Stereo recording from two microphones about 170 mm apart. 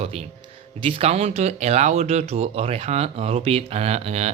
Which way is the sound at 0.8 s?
35° right (ahead or behind).